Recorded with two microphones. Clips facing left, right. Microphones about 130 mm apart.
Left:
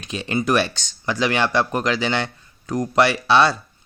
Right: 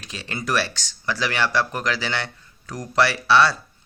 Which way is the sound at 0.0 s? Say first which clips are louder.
Left 8 dB; 20° left (ahead or behind).